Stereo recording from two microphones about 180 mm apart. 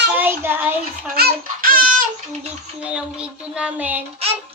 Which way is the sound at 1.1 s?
55° right (ahead or behind).